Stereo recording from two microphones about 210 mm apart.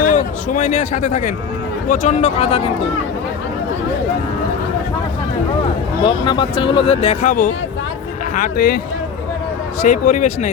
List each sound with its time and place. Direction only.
0.0 s speech: 35° left (ahead or behind)
6.1 s speech: 20° left (ahead or behind); by 8.8 s 45° left (ahead or behind)
9.8 s speech: 35° left (ahead or behind)